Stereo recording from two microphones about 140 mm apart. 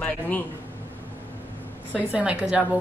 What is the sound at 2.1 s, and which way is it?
Speech, 10° right (ahead or behind).